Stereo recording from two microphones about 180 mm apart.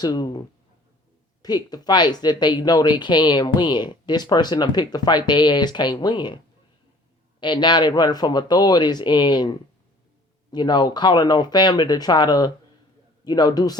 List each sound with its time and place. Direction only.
0.0 s speech: 25° left (ahead or behind)